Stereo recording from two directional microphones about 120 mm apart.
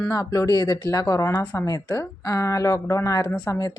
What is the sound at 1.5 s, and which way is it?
Speech, 35° left (ahead or behind).